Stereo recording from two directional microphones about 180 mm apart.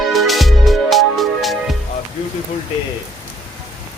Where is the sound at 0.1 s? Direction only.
Centre (ahead or behind).